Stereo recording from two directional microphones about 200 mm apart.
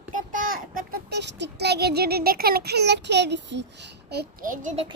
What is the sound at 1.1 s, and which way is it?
Child singing, 60° right (ahead or behind).